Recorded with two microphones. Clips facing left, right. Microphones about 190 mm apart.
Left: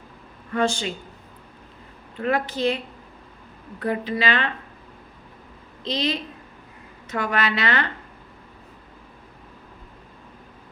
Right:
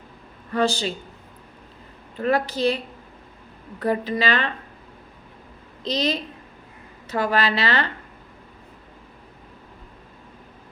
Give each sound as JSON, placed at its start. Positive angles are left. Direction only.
{"t": 0.5, "sound": "speech", "side_deg": -35}
{"t": 2.2, "sound": "speech", "side_deg": -35}
{"t": 5.8, "sound": "speech", "side_deg": -40}